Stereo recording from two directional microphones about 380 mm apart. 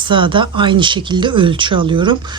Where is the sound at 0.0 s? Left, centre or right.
Centre.